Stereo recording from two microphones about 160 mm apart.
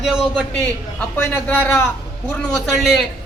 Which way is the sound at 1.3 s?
10° left (ahead or behind).